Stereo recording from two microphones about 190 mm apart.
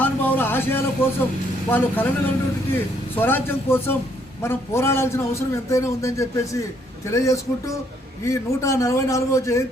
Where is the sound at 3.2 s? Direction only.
10° left (ahead or behind).